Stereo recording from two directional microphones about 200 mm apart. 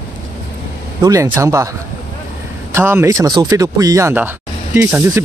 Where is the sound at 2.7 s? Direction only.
10° right (ahead or behind).